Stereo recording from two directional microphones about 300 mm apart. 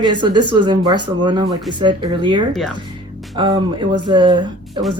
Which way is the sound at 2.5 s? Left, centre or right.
Centre.